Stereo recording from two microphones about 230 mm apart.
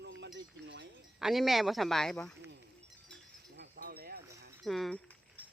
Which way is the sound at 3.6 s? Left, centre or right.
Right.